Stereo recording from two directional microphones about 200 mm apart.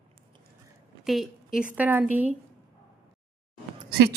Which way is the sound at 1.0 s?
Centre (ahead or behind).